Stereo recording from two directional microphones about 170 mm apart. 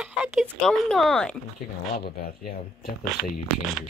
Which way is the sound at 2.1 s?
60° left (ahead or behind).